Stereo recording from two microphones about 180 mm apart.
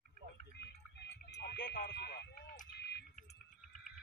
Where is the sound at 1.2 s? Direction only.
65° left (ahead or behind).